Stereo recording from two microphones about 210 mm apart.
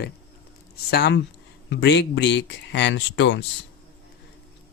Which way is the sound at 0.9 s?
55° left (ahead or behind).